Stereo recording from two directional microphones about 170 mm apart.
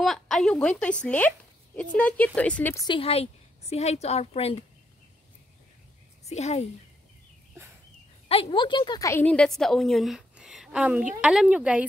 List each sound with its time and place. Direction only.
0.0 s a woman's voice: centre (ahead or behind)
2.9 s a woman's voice: 35° left (ahead or behind)
6.2 s a woman's voice: 40° left (ahead or behind)
8.3 s a woman's voice: 35° left (ahead or behind); by 11.8 s 10° right (ahead or behind)